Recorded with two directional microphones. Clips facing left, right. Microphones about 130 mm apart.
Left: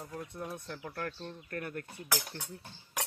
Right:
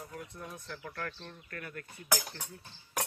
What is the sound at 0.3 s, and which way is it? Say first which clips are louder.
Speech: left 4 dB; 30° left (ahead or behind).